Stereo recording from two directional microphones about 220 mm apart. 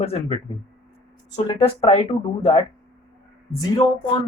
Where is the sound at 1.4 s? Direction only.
25° left (ahead or behind).